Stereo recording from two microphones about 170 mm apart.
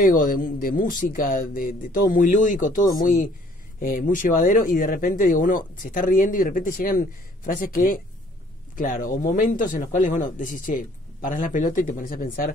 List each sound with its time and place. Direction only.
0.1 s speech: 55° left (ahead or behind)